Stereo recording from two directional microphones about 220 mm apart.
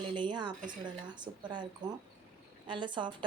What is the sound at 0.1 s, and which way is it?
A woman's voice, 20° right (ahead or behind).